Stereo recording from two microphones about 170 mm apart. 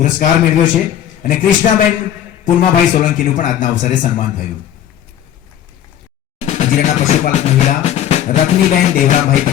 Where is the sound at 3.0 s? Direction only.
45° left (ahead or behind).